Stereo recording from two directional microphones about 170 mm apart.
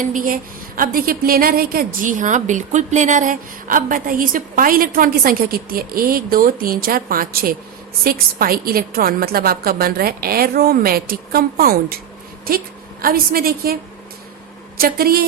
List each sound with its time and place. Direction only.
0.0 s a woman's voice: 50° right (ahead or behind)
14.8 s a woman's voice: 60° right (ahead or behind)